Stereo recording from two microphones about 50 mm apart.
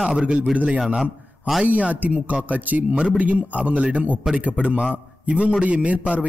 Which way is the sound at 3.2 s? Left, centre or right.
Right.